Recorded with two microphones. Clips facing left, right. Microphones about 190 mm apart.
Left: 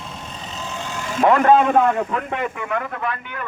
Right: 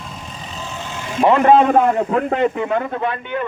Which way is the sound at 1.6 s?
35° right (ahead or behind).